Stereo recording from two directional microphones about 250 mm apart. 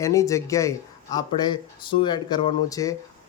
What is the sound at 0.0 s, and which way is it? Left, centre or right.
Speech, centre.